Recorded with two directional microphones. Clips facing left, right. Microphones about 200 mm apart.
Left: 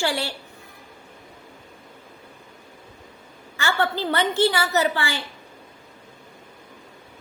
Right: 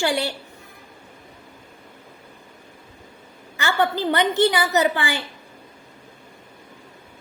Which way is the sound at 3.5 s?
20° right (ahead or behind).